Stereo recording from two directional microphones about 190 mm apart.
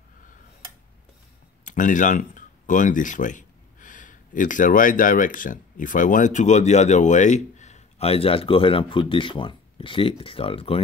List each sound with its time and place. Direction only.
1.6 s speech: 45° left (ahead or behind)